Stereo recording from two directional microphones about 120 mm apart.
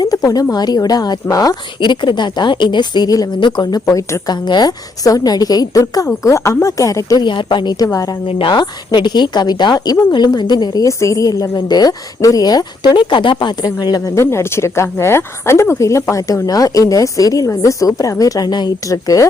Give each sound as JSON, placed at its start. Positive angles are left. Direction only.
{"t": 0.0, "sound": "a woman's voice", "side_deg": 30}
{"t": 4.4, "sound": "speech", "side_deg": 35}
{"t": 7.3, "sound": "speech", "side_deg": 40}